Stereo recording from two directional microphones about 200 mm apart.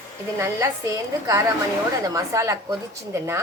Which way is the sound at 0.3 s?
15° right (ahead or behind).